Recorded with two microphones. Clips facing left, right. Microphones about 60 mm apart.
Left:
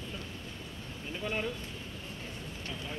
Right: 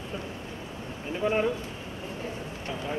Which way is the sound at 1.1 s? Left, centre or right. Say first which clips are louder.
Right 9 dB; right.